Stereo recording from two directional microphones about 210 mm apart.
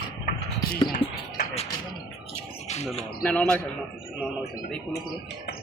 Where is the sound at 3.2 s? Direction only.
5° left (ahead or behind).